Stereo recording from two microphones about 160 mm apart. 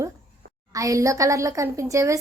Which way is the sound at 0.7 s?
20° right (ahead or behind).